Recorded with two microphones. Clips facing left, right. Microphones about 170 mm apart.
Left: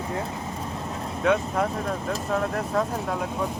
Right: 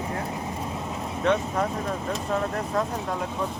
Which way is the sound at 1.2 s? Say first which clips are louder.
Left 1 dB; 5° left (ahead or behind).